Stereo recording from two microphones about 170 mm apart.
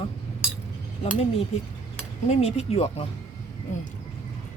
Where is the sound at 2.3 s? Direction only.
40° left (ahead or behind).